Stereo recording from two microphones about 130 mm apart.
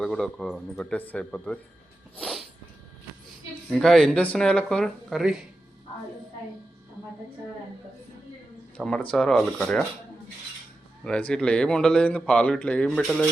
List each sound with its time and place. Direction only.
0.0 s speech: 5° left (ahead or behind)
2.1 s cat: centre (ahead or behind)
3.7 s speech: 5° left (ahead or behind)
8.8 s speech: 5° left (ahead or behind)
11.0 s speech: 10° left (ahead or behind)
12.9 s speech: centre (ahead or behind)